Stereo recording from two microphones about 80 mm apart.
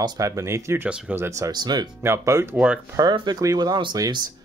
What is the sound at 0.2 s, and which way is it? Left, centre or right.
Speech, right.